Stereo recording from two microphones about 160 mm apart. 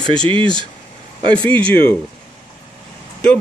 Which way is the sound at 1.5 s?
10° left (ahead or behind).